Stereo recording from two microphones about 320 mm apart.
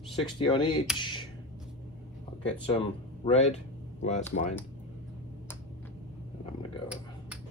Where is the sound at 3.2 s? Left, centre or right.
Centre.